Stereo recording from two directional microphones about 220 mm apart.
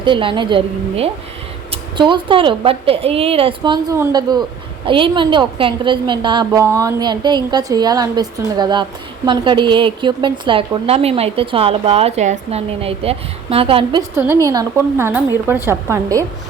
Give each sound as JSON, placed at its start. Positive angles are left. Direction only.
{"t": 0.0, "sound": "a woman's voice", "side_deg": -20}
{"t": 14.2, "sound": "a woman's voice", "side_deg": -15}